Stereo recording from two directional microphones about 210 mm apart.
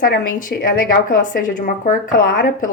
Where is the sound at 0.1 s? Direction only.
45° left (ahead or behind).